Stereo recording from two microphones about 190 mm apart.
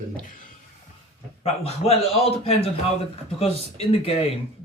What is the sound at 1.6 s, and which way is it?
A man's voice, 30° left (ahead or behind).